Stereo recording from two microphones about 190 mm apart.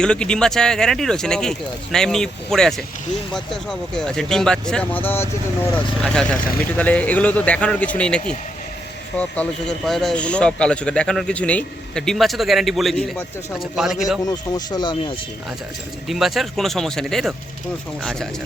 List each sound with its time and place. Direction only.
0.0 s speech: 5° left (ahead or behind)
14.3 s speech: 20° left (ahead or behind)
16.0 s speech: centre (ahead or behind)